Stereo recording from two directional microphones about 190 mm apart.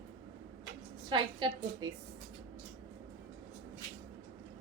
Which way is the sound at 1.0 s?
25° right (ahead or behind).